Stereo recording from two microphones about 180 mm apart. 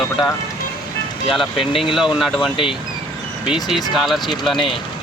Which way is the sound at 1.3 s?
Centre (ahead or behind).